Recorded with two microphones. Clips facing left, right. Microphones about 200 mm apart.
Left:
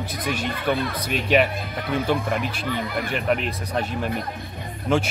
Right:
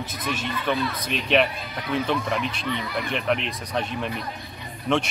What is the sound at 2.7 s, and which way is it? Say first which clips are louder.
Speech: left 3 dB; 50° left (ahead or behind).